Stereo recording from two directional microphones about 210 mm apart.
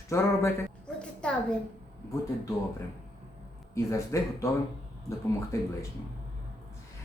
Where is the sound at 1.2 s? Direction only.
5° left (ahead or behind).